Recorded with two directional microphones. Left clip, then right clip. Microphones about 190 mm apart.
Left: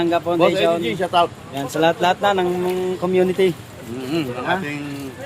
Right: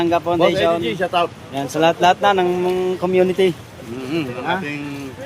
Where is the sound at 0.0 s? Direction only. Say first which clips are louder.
Right 1 dB; 25° right (ahead or behind).